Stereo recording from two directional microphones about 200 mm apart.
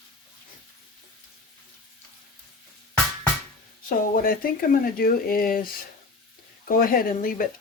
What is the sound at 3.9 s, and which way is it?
Speech, 45° left (ahead or behind).